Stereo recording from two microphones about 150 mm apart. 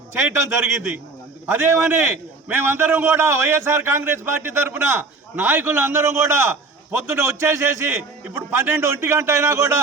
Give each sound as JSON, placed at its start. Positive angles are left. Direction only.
{"t": 0.1, "sound": "a man's voice", "side_deg": -15}